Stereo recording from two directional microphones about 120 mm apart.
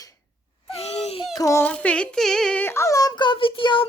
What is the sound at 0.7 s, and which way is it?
Baby cry, 60° left (ahead or behind).